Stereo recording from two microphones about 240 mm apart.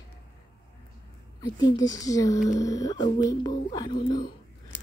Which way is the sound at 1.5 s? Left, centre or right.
Centre.